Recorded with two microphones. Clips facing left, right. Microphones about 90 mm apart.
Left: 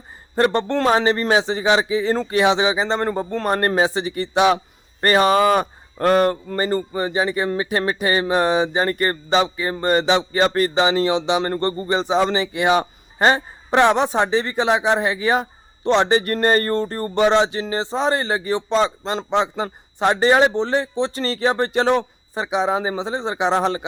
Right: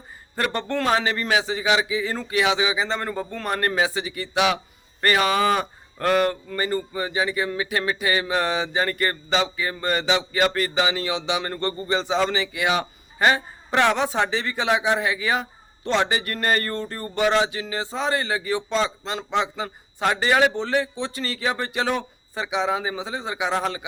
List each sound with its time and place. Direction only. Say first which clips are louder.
0.3 s a man's voice: left 7 dB; 30° left (ahead or behind)
8.3 s speech: left 6 dB; 25° left (ahead or behind)
11.9 s a man's voice: left 3 dB; 20° left (ahead or behind)
13.7 s a man's voice: left 5 dB; 20° left (ahead or behind)